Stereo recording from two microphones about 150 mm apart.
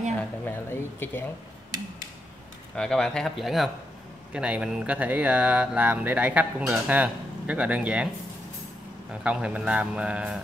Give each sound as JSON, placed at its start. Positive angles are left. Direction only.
{"t": 0.5, "sound": "speech", "side_deg": 15}
{"t": 2.7, "sound": "speech", "side_deg": 5}
{"t": 9.1, "sound": "speech", "side_deg": -5}